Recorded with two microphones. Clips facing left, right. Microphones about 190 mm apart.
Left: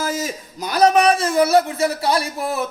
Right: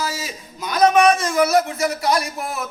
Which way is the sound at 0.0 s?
50° left (ahead or behind).